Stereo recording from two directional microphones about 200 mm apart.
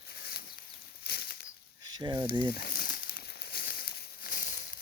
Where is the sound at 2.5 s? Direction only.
50° left (ahead or behind).